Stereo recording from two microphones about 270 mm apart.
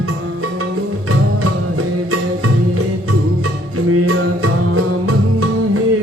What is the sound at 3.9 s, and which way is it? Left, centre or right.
Music, right.